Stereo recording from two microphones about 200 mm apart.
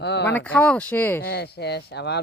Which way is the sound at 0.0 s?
60° left (ahead or behind).